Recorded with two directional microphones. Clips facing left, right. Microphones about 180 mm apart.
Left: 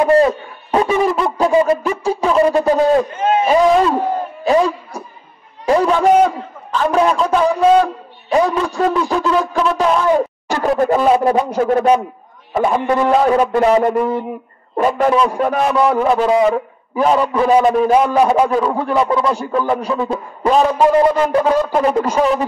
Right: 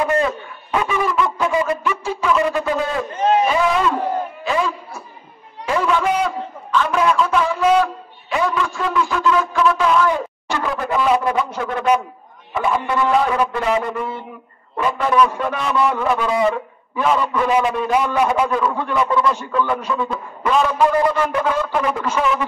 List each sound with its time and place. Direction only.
0.0 s a man's voice: 35° left (ahead or behind)
4.5 s a sound: 40° left (ahead or behind)
12.5 s a man's voice: 45° left (ahead or behind)
16.0 s a man's voice: 30° left (ahead or behind)